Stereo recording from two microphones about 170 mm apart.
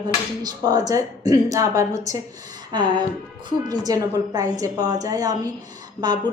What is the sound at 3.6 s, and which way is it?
A woman's voice, 20° right (ahead or behind).